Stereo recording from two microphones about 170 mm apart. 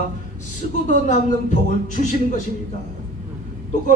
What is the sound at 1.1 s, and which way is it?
A man's voice, 45° left (ahead or behind).